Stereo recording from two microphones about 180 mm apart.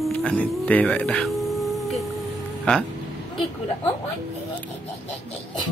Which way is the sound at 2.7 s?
5° left (ahead or behind).